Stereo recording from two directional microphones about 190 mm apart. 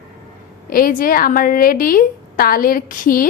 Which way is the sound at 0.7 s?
50° left (ahead or behind).